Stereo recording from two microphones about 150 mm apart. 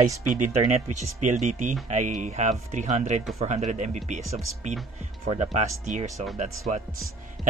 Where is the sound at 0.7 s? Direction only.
55° right (ahead or behind).